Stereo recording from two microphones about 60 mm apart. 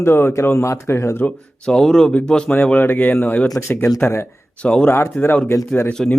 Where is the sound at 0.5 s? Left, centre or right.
Left.